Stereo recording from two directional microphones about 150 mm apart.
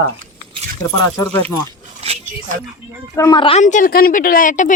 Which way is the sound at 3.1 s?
20° left (ahead or behind).